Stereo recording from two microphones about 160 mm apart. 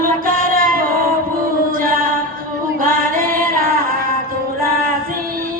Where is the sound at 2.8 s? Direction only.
60° right (ahead or behind).